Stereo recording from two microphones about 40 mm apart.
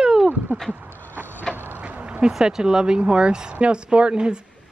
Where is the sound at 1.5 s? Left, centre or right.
Right.